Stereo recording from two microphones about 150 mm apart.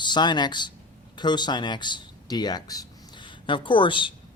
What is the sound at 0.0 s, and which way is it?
Speech, 30° left (ahead or behind).